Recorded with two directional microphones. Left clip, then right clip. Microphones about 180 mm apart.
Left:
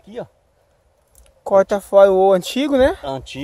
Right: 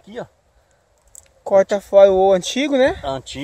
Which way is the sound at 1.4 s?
20° left (ahead or behind).